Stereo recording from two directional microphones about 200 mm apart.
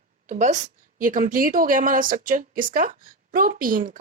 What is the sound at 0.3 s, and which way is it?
A woman's voice, 35° right (ahead or behind).